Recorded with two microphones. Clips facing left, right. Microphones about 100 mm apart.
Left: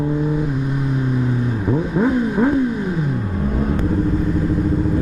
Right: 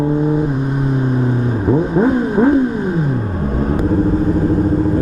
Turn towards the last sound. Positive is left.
turn(degrees=-40)  # may be behind; listen again after turning